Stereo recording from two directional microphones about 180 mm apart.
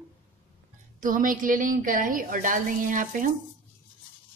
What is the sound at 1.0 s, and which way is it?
A woman's voice, 50° right (ahead or behind).